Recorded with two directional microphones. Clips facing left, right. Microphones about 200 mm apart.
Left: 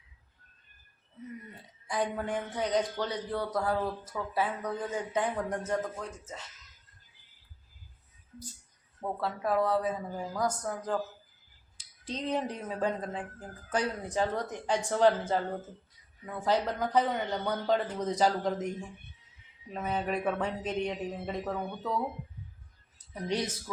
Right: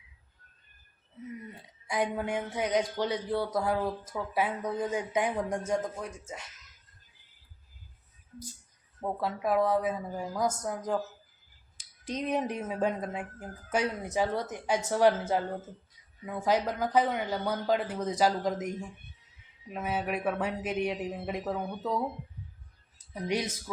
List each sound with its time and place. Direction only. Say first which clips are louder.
1.9 s speech: right 1 dB; 10° right (ahead or behind)
9.0 s speech: right 1 dB; 15° right (ahead or behind)
10.5 s speech: right 1 dB; 20° right (ahead or behind)
11.8 s a sound: right 2 dB; 10° right (ahead or behind)
12.5 s speech: right 3 dB; 25° right (ahead or behind)
12.8 s speech: even; 10° right (ahead or behind)
19.7 s speech: even; 5° right (ahead or behind)
23.2 s speech: right 1 dB; 10° right (ahead or behind)